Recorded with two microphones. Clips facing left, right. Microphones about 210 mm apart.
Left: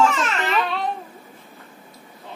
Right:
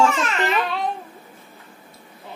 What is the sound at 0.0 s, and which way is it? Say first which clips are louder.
Babbling: right 1 dB; centre (ahead or behind).